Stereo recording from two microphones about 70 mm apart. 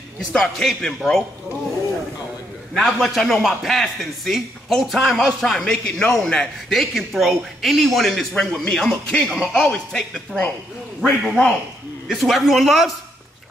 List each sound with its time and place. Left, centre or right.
0.3 s a man's voice: centre
2.7 s a man's voice: centre
11.0 s a man's voice: centre